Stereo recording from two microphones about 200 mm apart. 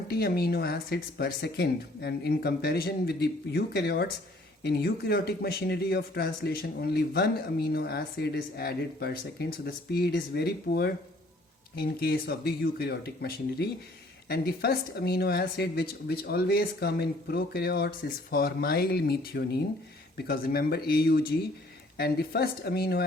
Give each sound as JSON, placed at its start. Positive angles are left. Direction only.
{"t": 0.1, "sound": "speech", "side_deg": 50}